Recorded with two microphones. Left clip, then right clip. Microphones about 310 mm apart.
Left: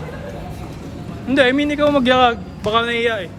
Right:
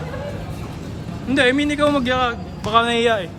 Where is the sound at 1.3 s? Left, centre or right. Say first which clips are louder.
Left 2 dB; centre.